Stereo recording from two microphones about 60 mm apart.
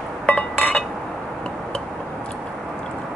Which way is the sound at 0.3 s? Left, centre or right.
Left.